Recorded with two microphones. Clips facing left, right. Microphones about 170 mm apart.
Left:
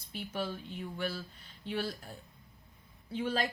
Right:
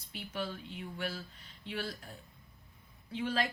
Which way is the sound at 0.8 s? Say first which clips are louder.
Left 2 dB; 40° left (ahead or behind).